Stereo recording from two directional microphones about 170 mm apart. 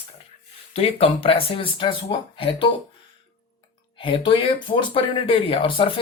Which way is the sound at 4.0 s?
30° left (ahead or behind).